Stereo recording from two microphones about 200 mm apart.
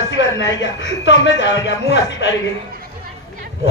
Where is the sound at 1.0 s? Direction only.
65° left (ahead or behind).